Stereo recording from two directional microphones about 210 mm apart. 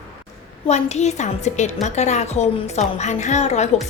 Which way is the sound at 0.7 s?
30° left (ahead or behind).